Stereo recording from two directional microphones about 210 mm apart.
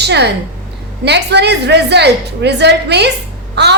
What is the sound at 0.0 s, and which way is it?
A woman's voice, 55° right (ahead or behind).